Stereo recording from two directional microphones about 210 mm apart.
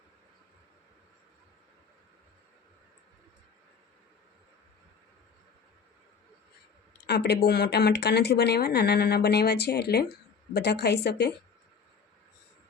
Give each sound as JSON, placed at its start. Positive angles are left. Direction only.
{"t": 7.1, "sound": "speech", "side_deg": 50}